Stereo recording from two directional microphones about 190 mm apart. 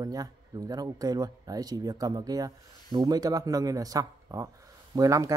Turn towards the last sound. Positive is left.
turn(degrees=-20)  # may be behind; listen again after turning